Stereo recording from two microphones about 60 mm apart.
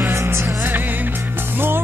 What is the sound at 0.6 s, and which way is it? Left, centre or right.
Music, right.